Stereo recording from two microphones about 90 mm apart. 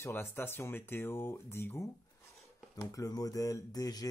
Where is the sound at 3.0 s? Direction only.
40° left (ahead or behind).